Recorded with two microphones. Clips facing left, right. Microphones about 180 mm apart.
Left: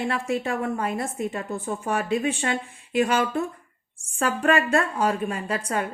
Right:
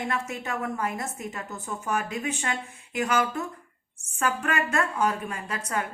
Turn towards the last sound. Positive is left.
turn(degrees=30)  # may be behind; listen again after turning